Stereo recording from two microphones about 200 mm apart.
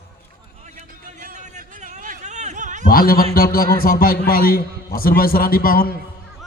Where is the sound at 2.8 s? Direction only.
45° left (ahead or behind).